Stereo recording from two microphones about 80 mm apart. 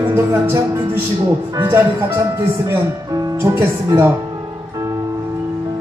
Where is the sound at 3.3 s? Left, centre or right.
Right.